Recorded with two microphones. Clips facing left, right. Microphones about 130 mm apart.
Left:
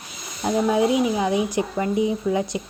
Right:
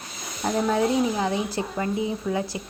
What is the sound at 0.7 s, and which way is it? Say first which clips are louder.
Speech: left 3 dB; 15° left (ahead or behind).